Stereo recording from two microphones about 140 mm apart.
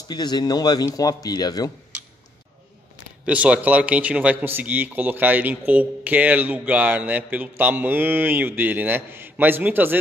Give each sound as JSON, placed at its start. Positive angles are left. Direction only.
{"t": 0.1, "sound": "speech", "side_deg": 30}
{"t": 3.3, "sound": "a man's voice", "side_deg": -10}